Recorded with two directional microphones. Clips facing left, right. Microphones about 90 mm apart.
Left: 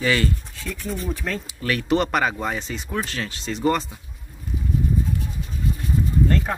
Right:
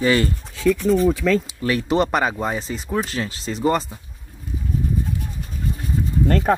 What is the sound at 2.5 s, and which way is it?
Speech, 35° right (ahead or behind).